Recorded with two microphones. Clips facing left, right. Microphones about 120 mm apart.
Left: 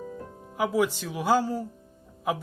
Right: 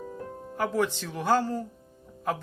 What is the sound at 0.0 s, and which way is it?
Speech, 5° left (ahead or behind).